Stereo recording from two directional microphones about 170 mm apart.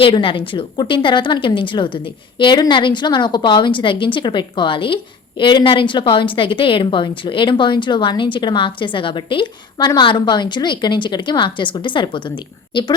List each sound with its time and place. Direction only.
0.0 s a woman's voice: 30° left (ahead or behind)